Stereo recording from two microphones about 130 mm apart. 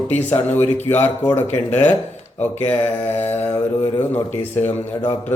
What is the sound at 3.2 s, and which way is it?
Speech, 15° left (ahead or behind).